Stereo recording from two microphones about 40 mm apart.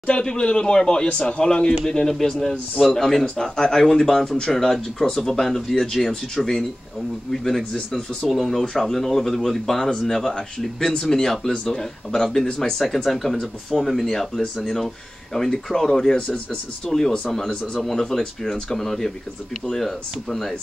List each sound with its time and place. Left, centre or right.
0.0 s speech: left; by 20.5 s centre